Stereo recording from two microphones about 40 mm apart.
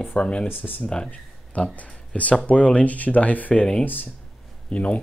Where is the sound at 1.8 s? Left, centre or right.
Left.